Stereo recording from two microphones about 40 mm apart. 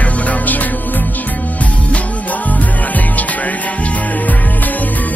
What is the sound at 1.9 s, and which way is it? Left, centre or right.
Music, left.